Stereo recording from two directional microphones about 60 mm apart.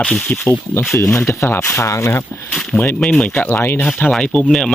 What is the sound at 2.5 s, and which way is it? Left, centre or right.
Speech, centre.